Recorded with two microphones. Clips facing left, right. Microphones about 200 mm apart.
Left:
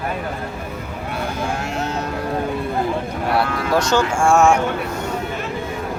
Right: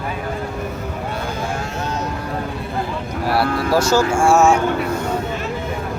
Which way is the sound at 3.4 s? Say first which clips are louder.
Right 2 dB; 35° right (ahead or behind).